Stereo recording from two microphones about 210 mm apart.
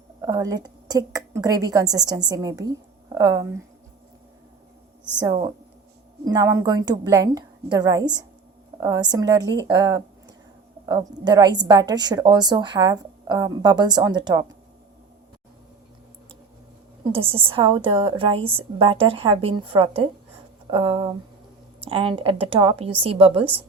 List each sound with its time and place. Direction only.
0.2 s a woman's voice: 15° right (ahead or behind)
5.2 s a woman's voice: 20° right (ahead or behind)
17.0 s a woman's voice: 25° right (ahead or behind)